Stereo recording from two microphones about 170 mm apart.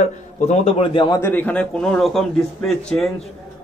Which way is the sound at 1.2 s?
10° left (ahead or behind).